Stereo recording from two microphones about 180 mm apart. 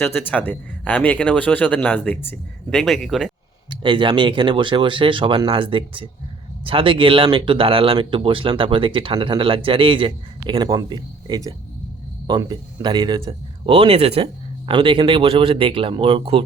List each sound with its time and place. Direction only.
0.0 s speech: 10° left (ahead or behind)
3.7 s speech: 30° right (ahead or behind)